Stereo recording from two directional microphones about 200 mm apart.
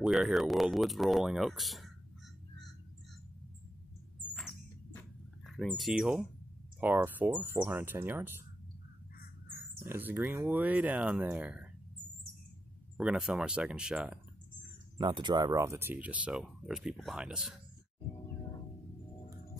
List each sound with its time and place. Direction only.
0.0 s speech: centre (ahead or behind)
4.3 s rodents: centre (ahead or behind)
5.5 s speech: centre (ahead or behind)
9.8 s speech: 10° right (ahead or behind)
12.9 s speech: 5° right (ahead or behind)
15.0 s speech: 25° right (ahead or behind); by 17.6 s 5° right (ahead or behind)
18.1 s music: 15° left (ahead or behind)